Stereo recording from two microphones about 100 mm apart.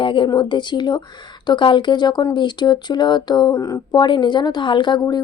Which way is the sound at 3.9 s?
50° left (ahead or behind).